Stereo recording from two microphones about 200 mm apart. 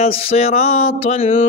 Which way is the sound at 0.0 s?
30° left (ahead or behind).